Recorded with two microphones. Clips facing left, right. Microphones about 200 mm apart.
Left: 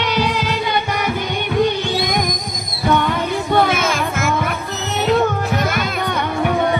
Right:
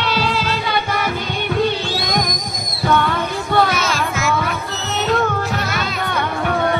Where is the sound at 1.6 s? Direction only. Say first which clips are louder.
Left 3 dB; 15° left (ahead or behind).